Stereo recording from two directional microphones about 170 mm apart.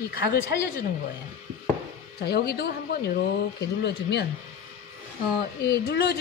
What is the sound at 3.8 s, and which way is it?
Speech, 80° left.